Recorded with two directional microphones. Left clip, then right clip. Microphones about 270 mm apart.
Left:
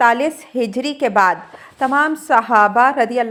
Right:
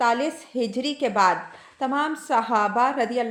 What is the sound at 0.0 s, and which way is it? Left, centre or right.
A woman's voice, left.